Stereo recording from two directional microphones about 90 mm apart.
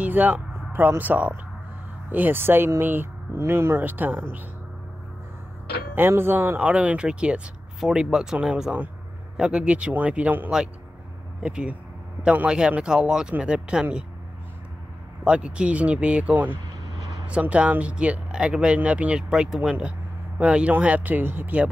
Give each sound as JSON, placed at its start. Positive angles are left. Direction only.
{"t": 0.0, "sound": "speech", "side_deg": -20}
{"t": 5.9, "sound": "speech", "side_deg": -25}
{"t": 6.6, "sound": "speech", "side_deg": -15}
{"t": 15.2, "sound": "speech", "side_deg": -10}